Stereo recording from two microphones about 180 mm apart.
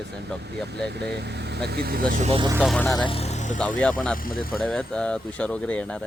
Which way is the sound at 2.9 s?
25° left (ahead or behind).